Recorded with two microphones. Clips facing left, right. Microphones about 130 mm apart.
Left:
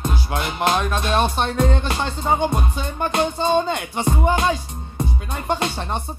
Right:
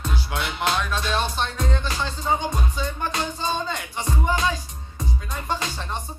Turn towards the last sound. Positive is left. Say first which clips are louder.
# left 5 dB
turn(degrees=60)  # may be behind; listen again after turning